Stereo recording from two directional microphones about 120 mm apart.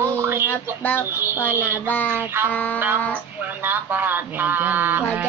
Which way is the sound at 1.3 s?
25° left (ahead or behind).